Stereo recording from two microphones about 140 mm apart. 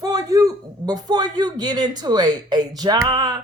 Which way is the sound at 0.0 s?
25° right (ahead or behind).